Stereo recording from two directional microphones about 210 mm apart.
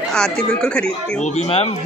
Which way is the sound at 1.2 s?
30° left (ahead or behind).